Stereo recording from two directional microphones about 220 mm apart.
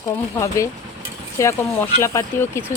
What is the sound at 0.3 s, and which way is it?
Speech, 15° left (ahead or behind).